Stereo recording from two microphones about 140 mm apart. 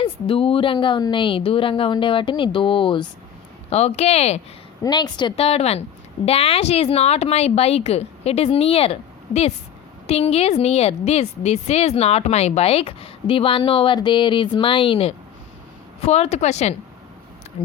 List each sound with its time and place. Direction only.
0.0 s speech: 40° left (ahead or behind)
3.7 s a woman's voice: 50° left (ahead or behind)
4.8 s speech: 30° left (ahead or behind)
5.4 s a woman's voice: 45° left (ahead or behind)